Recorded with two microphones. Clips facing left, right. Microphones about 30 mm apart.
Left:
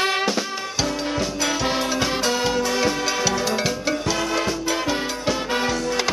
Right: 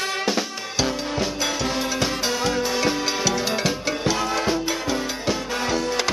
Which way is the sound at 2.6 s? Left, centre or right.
Centre.